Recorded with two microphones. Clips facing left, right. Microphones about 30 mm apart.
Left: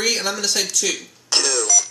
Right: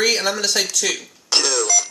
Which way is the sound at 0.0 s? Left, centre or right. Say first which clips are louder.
Right 3 dB; centre.